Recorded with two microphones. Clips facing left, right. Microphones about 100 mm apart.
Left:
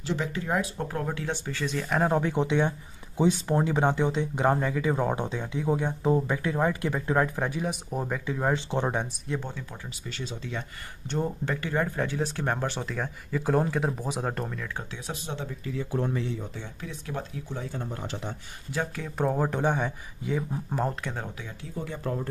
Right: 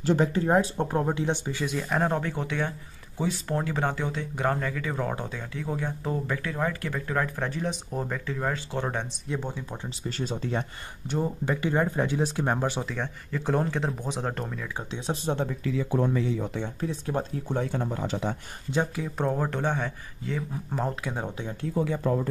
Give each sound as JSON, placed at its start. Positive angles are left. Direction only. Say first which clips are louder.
{"t": 0.0, "sound": "speech", "louder": "right 7 dB", "side_deg": -45}
{"t": 9.3, "sound": "speech", "louder": "right 2 dB", "side_deg": -10}
{"t": 10.0, "sound": "speech", "louder": "right 6 dB", "side_deg": -40}
{"t": 11.1, "sound": "speech", "louder": "right 1 dB", "side_deg": -5}
{"t": 12.8, "sound": "speech", "louder": "even", "side_deg": 5}
{"t": 15.3, "sound": "speech", "louder": "right 6 dB", "side_deg": -60}
{"t": 16.8, "sound": "speech", "louder": "right 5 dB", "side_deg": -35}
{"t": 17.5, "sound": "speech", "louder": "right 6 dB", "side_deg": -65}
{"t": 18.9, "sound": "speech", "louder": "right 1 dB", "side_deg": -5}
{"t": 19.2, "sound": "speech", "louder": "left 2 dB", "side_deg": 5}
{"t": 20.7, "sound": "speech", "louder": "even", "side_deg": 0}
{"t": 21.8, "sound": "speech", "louder": "right 8 dB", "side_deg": -90}